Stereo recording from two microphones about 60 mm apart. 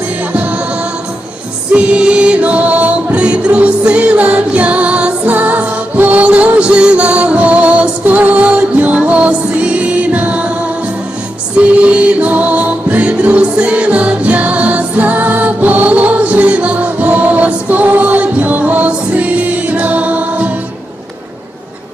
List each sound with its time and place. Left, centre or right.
1.7 s music: centre
11.5 s music: right